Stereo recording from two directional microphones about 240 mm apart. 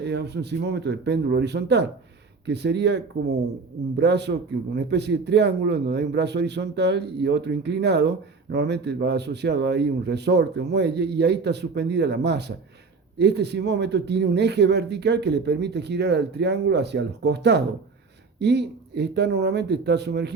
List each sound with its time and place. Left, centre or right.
0.0 s speech: right